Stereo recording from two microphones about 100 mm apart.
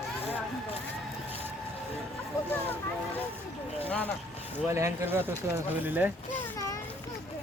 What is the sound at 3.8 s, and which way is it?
Vehicle, 15° left (ahead or behind).